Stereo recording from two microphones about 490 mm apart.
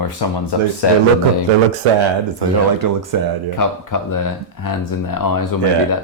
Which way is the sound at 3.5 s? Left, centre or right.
Left.